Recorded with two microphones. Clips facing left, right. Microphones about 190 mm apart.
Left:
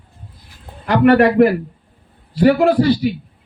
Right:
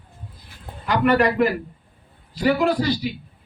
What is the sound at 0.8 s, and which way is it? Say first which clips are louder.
Speech: left 7 dB; 60° left (ahead or behind).